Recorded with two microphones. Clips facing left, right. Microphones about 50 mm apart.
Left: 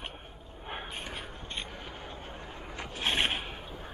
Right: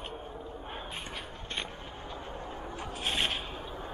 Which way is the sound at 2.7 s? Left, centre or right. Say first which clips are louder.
Left 3 dB; left.